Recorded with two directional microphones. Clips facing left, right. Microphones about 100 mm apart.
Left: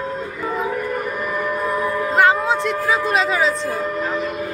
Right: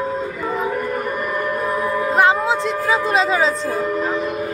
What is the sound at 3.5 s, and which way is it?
Music, 5° right (ahead or behind).